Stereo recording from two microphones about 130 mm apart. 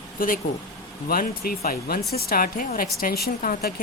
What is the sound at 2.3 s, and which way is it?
A woman's voice, 90° left.